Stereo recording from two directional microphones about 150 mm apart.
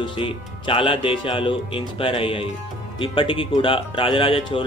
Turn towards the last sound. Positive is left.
turn(degrees=35)  # may be behind; listen again after turning